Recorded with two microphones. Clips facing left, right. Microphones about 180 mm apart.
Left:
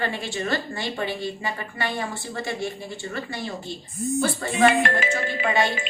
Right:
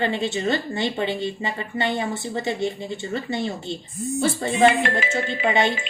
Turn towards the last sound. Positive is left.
turn(degrees=-20)  # may be behind; listen again after turning